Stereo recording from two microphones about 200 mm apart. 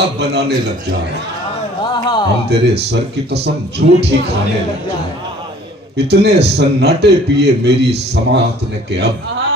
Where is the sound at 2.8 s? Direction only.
55° right (ahead or behind).